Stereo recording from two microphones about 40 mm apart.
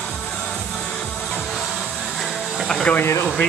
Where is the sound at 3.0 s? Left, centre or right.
Left.